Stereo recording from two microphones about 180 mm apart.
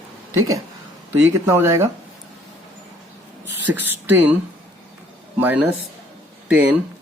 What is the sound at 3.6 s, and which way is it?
Speech, 10° right (ahead or behind).